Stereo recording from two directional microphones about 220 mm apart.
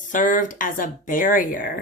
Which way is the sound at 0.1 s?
35° left (ahead or behind).